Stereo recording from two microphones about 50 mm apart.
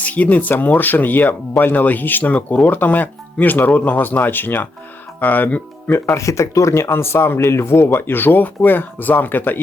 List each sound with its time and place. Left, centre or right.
0.0 s speech: left
5.9 s speech: left